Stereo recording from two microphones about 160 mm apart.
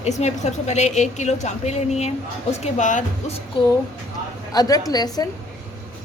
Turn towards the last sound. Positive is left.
turn(degrees=25)  # may be behind; listen again after turning